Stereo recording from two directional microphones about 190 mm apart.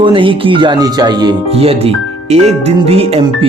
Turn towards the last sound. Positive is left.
turn(degrees=-30)  # may be behind; listen again after turning